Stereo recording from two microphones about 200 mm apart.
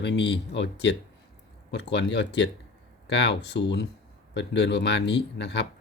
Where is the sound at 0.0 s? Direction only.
60° left (ahead or behind).